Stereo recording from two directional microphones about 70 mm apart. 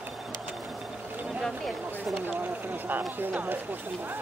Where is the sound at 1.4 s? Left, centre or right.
Centre.